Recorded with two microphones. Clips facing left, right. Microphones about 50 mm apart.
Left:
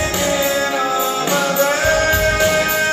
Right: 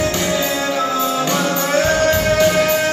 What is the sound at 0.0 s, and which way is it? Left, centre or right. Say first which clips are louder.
Music: left 1 dB; centre.